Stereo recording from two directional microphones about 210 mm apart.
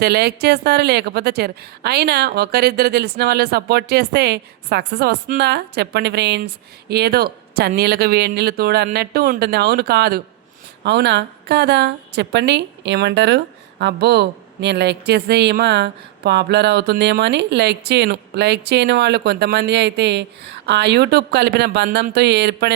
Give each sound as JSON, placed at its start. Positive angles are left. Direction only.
{"t": 0.0, "sound": "a woman's voice", "side_deg": -50}